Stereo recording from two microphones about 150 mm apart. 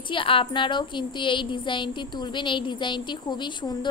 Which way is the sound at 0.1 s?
35° left (ahead or behind).